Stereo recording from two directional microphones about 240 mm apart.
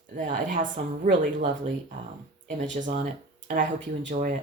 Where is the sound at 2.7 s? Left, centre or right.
Right.